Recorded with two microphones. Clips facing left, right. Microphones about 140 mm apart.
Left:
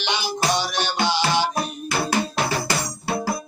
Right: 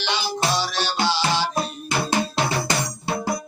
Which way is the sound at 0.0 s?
15° left (ahead or behind).